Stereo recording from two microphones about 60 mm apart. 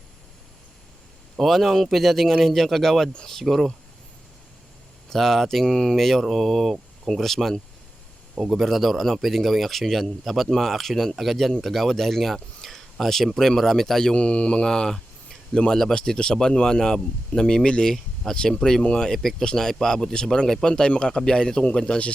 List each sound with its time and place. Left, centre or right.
1.4 s a man's voice: centre
3.1 s speech: centre
3.3 s a man's voice: centre
5.0 s a man's voice: centre